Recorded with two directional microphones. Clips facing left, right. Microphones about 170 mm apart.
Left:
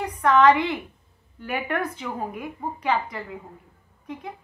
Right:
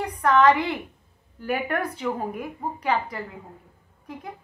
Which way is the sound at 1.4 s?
35° right (ahead or behind).